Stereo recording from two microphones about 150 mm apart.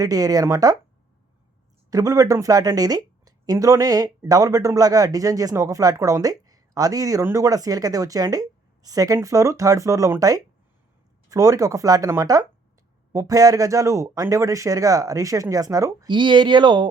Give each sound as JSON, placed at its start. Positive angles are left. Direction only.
{"t": 0.0, "sound": "speech", "side_deg": -25}
{"t": 1.9, "sound": "speech", "side_deg": -25}